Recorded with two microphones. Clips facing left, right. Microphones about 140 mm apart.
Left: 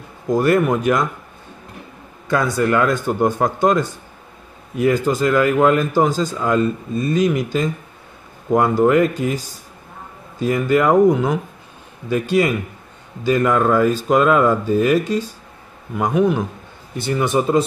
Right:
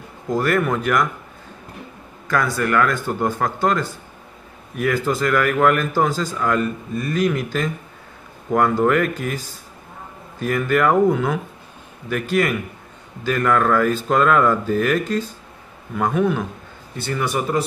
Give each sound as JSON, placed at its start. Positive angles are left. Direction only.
{"t": 0.3, "sound": "speech", "side_deg": 20}
{"t": 2.2, "sound": "speech", "side_deg": 20}